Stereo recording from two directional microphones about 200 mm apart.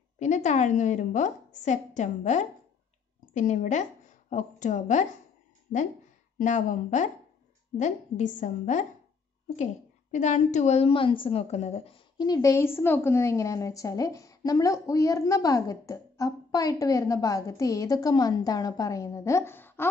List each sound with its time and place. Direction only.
0.2 s a woman's voice: 35° left (ahead or behind)
6.3 s a woman's voice: 40° left (ahead or behind)
10.1 s a woman's voice: 35° left (ahead or behind); by 19.9 s 10° left (ahead or behind)